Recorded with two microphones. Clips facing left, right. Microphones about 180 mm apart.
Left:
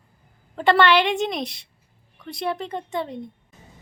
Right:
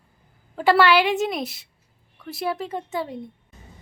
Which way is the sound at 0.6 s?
5° right (ahead or behind).